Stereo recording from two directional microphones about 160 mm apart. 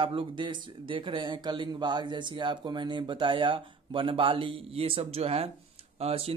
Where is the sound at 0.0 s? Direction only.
35° right (ahead or behind).